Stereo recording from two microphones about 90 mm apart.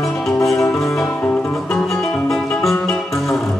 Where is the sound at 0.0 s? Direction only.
5° left (ahead or behind).